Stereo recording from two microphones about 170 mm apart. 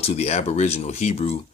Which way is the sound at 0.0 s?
40° left (ahead or behind).